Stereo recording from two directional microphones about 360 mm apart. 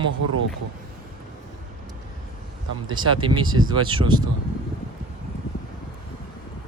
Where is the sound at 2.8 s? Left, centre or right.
Centre.